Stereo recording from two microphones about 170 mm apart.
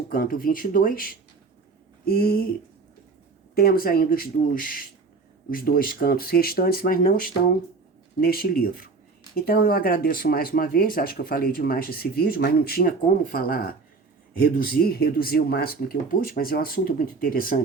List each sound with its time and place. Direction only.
0.1 s speech: 60° left (ahead or behind)
3.5 s speech: 60° left (ahead or behind)